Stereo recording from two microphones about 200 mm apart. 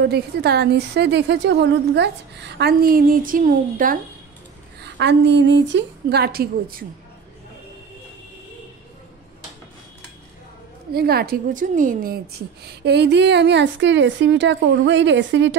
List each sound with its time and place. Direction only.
0.0 s a woman's voice: 55° right (ahead or behind)
4.7 s a woman's voice: 60° right (ahead or behind)
10.9 s a woman's voice: 50° right (ahead or behind)
12.6 s a woman's voice: 55° right (ahead or behind)